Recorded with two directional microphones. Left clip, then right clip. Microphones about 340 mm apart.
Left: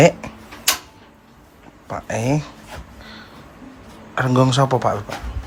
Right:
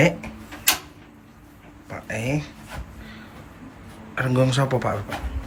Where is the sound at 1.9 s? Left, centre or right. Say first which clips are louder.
Left 5 dB; centre.